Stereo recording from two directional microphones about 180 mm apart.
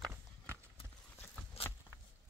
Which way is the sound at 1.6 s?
35° left (ahead or behind).